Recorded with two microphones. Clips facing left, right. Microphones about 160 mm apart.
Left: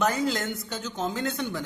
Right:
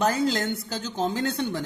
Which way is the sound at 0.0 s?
30° right (ahead or behind).